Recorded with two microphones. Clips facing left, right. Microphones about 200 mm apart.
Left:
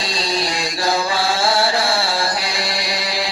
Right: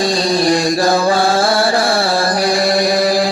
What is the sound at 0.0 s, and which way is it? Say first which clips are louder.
Music: right 9 dB; 55° right (ahead or behind).